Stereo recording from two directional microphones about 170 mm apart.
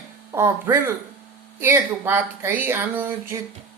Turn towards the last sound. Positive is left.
turn(degrees=-15)  # may be behind; listen again after turning